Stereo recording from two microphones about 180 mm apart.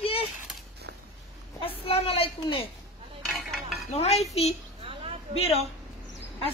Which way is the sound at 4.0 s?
35° left (ahead or behind).